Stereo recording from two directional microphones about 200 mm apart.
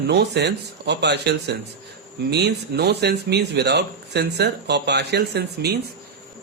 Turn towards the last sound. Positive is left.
turn(degrees=-55)  # may be behind; listen again after turning